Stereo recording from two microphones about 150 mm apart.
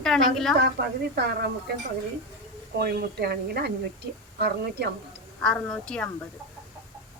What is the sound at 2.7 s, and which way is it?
A woman's voice, 90° right.